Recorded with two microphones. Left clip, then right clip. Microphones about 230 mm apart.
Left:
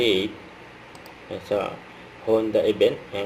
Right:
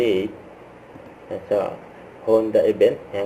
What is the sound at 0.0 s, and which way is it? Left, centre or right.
Speech, centre.